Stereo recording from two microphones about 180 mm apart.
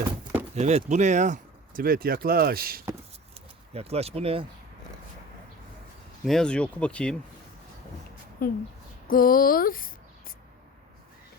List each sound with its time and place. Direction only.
0.5 s speech: 40° right (ahead or behind); by 2.8 s 55° right (ahead or behind)
3.3 s speech: 35° right (ahead or behind)
6.2 s speech: 5° left (ahead or behind)
8.4 s speech: 55° left (ahead or behind)